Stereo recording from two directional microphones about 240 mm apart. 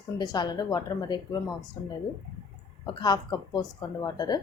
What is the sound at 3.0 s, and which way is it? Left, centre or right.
A woman's voice, centre.